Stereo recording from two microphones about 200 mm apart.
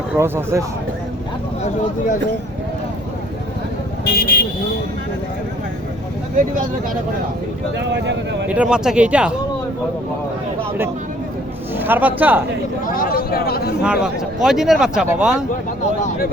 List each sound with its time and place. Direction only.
0.2 s speech: 15° right (ahead or behind)
4.0 s speech: 50° left (ahead or behind)
7.9 s speech: 60° right (ahead or behind)
8.4 s speech: 5° right (ahead or behind)
11.8 s speech: 10° right (ahead or behind)
12.8 s speech: 45° left (ahead or behind)
13.8 s speech: 5° right (ahead or behind)
16.0 s speech: 45° left (ahead or behind)